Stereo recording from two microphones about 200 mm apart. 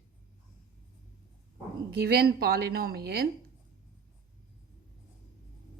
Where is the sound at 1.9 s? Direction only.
50° right (ahead or behind).